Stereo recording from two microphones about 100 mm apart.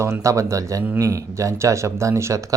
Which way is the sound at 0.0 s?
30° right (ahead or behind).